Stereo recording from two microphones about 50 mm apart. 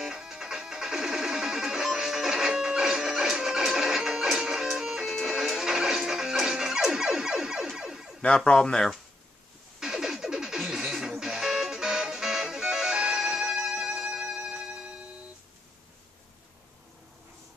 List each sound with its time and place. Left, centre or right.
0.0 s music: centre
7.7 s emergency vehicle: centre
8.5 s speech: centre
9.8 s music: centre